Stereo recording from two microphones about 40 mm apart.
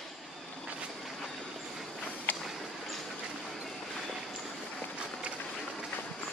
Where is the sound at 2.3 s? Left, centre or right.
Left.